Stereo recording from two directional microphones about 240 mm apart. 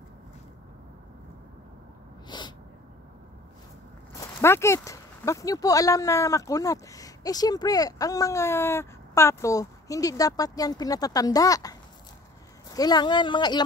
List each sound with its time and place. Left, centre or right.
2.2 s sneeze: centre
4.2 s speech: centre
12.7 s speech: centre